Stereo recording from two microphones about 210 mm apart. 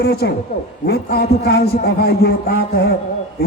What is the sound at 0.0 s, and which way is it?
A man's voice, 50° left (ahead or behind).